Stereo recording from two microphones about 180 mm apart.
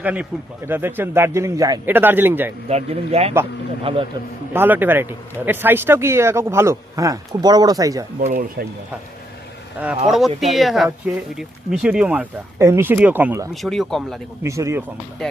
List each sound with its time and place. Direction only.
0.0 s speech: 10° right (ahead or behind)
2.6 s a man's voice: 35° right (ahead or behind)
4.5 s speech: 10° right (ahead or behind)
8.2 s speech: 50° right (ahead or behind)
10.1 s speech: centre (ahead or behind)
13.5 s speech: centre (ahead or behind)
14.4 s speech: 15° right (ahead or behind)
15.2 s speech: 5° left (ahead or behind)